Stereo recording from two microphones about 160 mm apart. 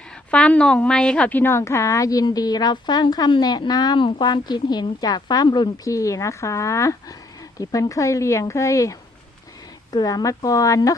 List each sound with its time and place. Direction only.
0.3 s a woman's voice: 10° left (ahead or behind)